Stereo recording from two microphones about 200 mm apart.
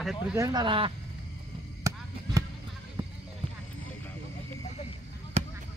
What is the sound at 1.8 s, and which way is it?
Chop, 15° right (ahead or behind).